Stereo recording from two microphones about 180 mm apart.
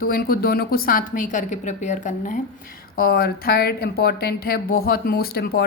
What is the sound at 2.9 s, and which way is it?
Speech, 55° left (ahead or behind).